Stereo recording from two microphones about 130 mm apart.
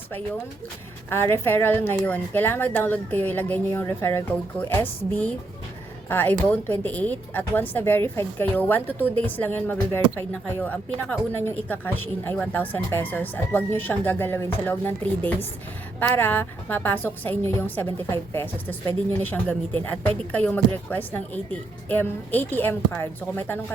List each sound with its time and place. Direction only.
1.1 s speech: 15° left (ahead or behind)